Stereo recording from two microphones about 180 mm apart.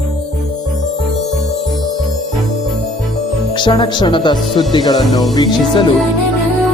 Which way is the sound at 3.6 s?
25° left (ahead or behind).